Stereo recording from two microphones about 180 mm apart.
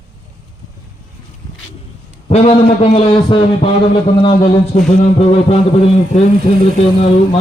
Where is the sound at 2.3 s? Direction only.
35° left (ahead or behind).